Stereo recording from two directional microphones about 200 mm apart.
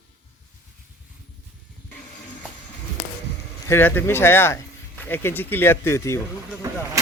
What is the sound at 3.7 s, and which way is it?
Speech, 10° left (ahead or behind).